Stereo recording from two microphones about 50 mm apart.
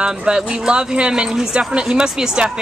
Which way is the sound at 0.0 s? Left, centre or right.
Centre.